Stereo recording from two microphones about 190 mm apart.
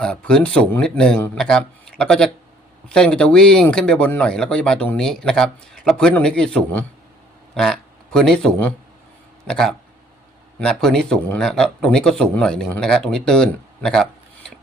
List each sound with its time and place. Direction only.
0.0 s a man's voice: 5° left (ahead or behind)